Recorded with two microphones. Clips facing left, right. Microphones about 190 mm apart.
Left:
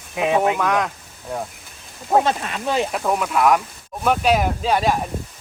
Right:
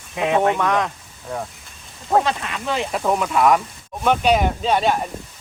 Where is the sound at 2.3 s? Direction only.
35° left (ahead or behind).